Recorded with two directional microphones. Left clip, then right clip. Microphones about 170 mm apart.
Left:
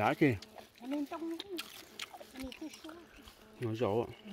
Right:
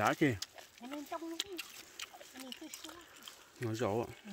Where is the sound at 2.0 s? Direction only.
20° left (ahead or behind).